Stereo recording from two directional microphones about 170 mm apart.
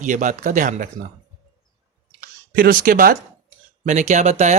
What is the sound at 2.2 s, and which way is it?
Speech, 60° right (ahead or behind).